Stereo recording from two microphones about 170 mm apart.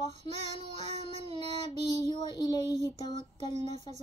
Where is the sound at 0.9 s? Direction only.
40° right (ahead or behind).